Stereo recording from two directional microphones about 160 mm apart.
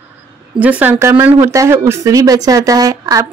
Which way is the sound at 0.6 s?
10° right (ahead or behind).